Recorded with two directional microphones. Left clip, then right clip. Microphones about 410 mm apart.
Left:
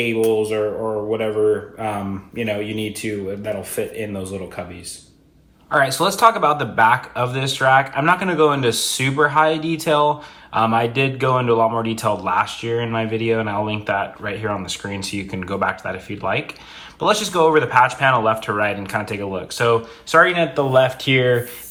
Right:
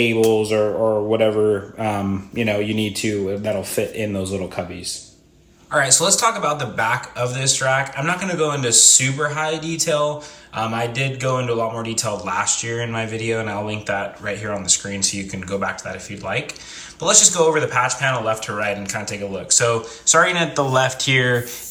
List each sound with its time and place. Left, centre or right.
0.0 s speech: right
5.7 s a man's voice: centre